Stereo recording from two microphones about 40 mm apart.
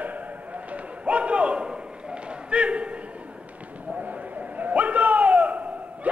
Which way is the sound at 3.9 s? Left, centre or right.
Right.